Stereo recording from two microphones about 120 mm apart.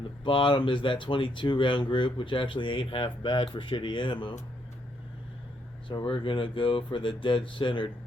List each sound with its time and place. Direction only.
0.3 s speech: 45° left (ahead or behind)
5.9 s speech: 45° left (ahead or behind)